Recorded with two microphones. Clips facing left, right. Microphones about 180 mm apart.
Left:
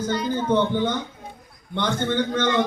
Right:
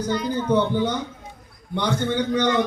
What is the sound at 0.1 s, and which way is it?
Speech, 30° left (ahead or behind).